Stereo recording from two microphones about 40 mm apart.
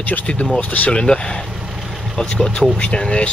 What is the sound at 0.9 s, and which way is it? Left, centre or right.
Speech, left.